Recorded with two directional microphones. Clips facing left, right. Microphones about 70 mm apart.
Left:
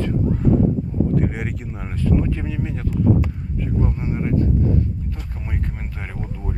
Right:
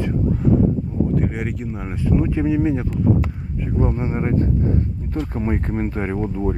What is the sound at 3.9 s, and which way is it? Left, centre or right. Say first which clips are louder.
Speech: right 1 dB; right.